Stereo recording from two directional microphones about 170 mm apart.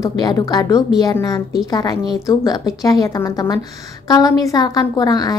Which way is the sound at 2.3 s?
20° left (ahead or behind).